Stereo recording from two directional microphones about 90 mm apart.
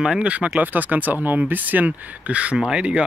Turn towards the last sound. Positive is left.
turn(degrees=-10)  # may be behind; listen again after turning